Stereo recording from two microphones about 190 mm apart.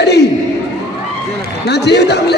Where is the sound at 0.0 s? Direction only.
60° left (ahead or behind).